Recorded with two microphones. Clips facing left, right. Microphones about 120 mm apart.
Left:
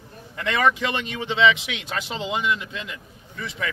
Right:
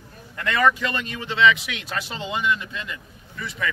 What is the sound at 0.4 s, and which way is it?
A man's voice, 25° left (ahead or behind).